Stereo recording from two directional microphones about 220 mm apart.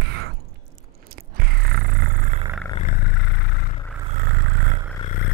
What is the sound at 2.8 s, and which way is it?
Vehicle, 45° left (ahead or behind).